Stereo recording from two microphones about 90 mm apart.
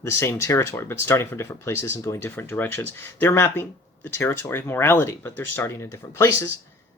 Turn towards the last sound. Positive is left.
turn(degrees=30)  # may be behind; listen again after turning